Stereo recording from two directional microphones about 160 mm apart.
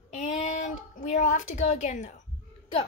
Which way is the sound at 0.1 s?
50° left (ahead or behind).